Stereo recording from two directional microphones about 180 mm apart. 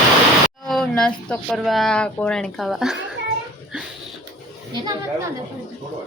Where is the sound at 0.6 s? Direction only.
Centre (ahead or behind).